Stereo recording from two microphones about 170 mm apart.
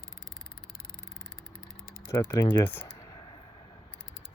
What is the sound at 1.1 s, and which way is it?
Vehicle, 5° left (ahead or behind).